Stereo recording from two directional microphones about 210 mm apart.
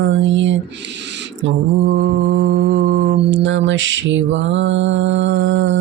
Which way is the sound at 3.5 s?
65° right (ahead or behind).